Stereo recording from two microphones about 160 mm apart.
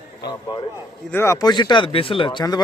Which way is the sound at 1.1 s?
15° left (ahead or behind).